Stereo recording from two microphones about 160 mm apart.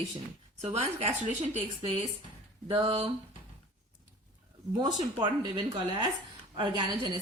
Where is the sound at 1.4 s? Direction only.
40° right (ahead or behind).